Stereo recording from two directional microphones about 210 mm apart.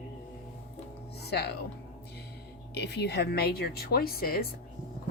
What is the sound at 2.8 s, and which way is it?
A woman's voice, 50° left (ahead or behind).